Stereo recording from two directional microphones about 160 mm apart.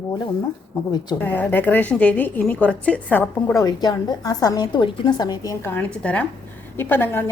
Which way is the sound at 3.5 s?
25° left (ahead or behind).